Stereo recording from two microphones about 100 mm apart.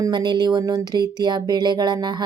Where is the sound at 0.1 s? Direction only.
50° right (ahead or behind).